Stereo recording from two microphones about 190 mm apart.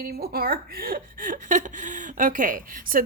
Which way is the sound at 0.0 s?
50° right (ahead or behind).